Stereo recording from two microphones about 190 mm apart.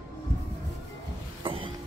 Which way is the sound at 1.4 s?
25° right (ahead or behind).